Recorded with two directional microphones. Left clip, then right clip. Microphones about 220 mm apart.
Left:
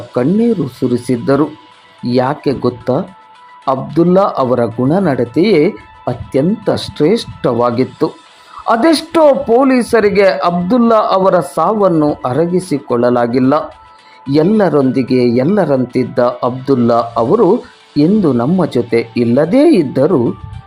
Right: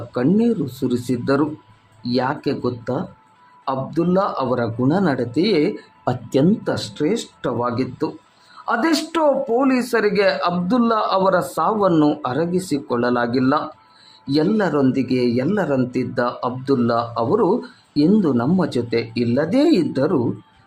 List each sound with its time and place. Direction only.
0.1 s a man's voice: 20° left (ahead or behind)